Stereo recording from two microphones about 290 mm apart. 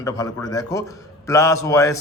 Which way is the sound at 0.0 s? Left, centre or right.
Centre.